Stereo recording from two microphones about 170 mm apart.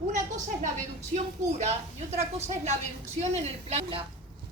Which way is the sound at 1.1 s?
40° right (ahead or behind).